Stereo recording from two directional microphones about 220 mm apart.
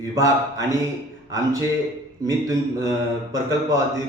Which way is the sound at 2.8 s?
15° right (ahead or behind).